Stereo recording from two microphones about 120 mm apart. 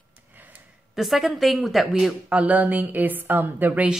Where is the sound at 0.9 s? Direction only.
Centre (ahead or behind).